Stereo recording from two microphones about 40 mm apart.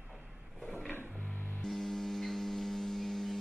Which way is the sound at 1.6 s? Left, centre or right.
Centre.